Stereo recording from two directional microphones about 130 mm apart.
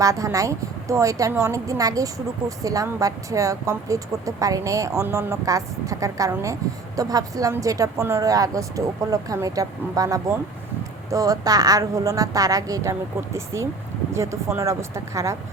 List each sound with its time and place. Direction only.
0.0 s a woman's voice: 25° right (ahead or behind)